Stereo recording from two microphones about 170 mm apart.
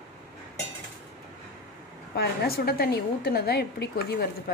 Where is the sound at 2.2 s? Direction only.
65° left (ahead or behind).